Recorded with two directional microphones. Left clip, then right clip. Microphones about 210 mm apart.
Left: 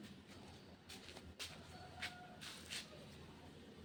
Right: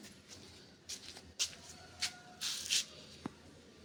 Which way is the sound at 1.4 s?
50° right (ahead or behind).